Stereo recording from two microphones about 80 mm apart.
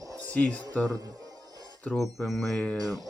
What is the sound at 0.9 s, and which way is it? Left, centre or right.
Music, right.